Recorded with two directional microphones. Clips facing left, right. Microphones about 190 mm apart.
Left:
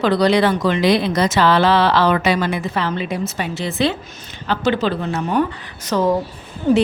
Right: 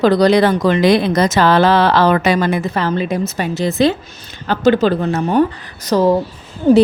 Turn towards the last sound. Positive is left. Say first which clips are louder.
# right 5 dB
turn(degrees=-35)  # may be behind; listen again after turning